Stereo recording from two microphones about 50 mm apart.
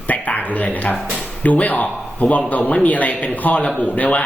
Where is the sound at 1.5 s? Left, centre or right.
Left.